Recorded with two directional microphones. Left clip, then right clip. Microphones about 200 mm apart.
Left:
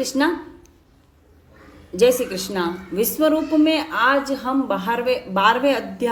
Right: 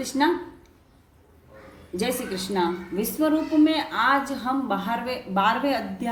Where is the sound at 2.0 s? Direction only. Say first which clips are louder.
Left 11 dB; 45° left (ahead or behind).